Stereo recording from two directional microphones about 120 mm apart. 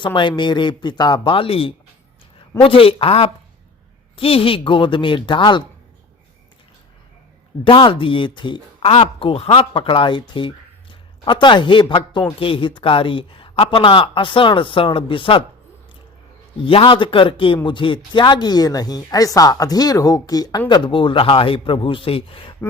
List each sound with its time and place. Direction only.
0.0 s speech: 45° left (ahead or behind)
7.6 s speech: 45° left (ahead or behind)
16.6 s speech: 45° left (ahead or behind)